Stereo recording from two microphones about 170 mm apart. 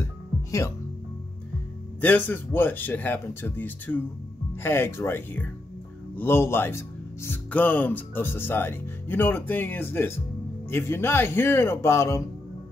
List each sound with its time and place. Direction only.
0.0 s music: 15° left (ahead or behind)
2.0 s speech: 10° left (ahead or behind)